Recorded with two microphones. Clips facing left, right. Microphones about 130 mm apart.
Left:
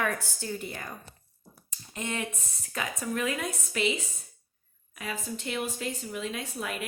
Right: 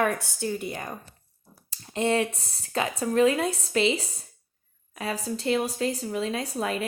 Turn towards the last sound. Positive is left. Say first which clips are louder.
# right 7 dB
turn(degrees=-35)  # may be behind; listen again after turning